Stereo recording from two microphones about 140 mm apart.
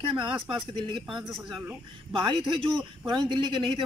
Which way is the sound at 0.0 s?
35° right (ahead or behind).